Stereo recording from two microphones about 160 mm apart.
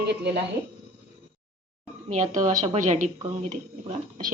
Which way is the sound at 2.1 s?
50° right (ahead or behind).